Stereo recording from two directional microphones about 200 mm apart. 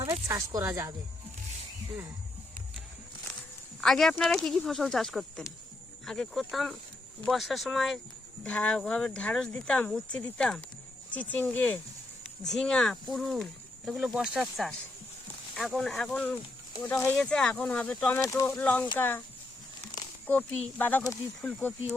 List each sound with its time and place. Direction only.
0.0 s speech: 20° right (ahead or behind)
3.8 s speech: centre (ahead or behind)
20.2 s speech: 10° left (ahead or behind)